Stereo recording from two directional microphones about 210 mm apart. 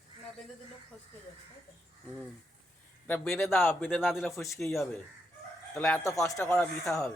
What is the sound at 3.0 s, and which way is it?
Speech, 10° left (ahead or behind).